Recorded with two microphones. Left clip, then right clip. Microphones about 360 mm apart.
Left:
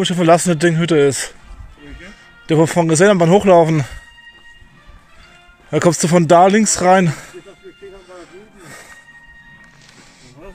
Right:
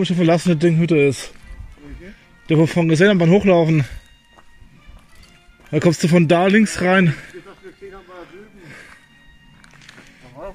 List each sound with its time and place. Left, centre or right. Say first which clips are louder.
0.0 s speech: left 5 dB; left
2.4 s speech: left 3 dB; left
5.7 s speech: left 3 dB; left